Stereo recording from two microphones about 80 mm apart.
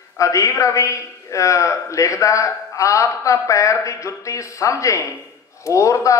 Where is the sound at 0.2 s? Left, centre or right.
Left.